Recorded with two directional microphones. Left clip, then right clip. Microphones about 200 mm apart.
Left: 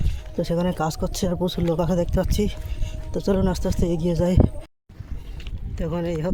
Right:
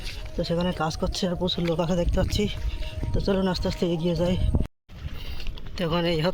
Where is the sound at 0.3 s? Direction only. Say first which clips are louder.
Left 3 dB; 35° left (ahead or behind).